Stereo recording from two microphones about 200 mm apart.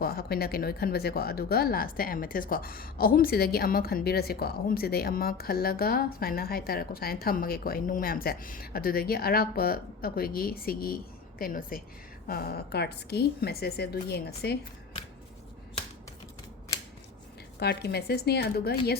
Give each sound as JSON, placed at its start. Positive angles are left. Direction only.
{"t": 0.0, "sound": "speech", "side_deg": 50}
{"t": 17.6, "sound": "speech", "side_deg": 55}